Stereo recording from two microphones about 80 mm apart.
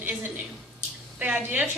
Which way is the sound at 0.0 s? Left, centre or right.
Right.